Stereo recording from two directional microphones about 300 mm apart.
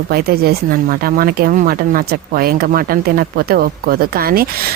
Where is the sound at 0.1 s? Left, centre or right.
Right.